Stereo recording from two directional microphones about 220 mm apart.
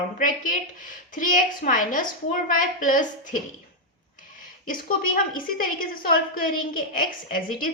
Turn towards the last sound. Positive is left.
turn(degrees=40)  # may be behind; listen again after turning